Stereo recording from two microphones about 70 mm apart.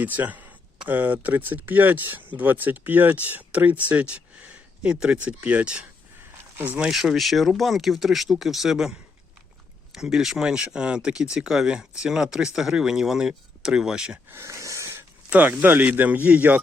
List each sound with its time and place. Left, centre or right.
0.0 s speech: right
14.4 s a sound: right
15.3 s speech: right